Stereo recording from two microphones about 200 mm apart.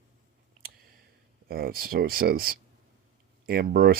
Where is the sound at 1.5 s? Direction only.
50° right (ahead or behind).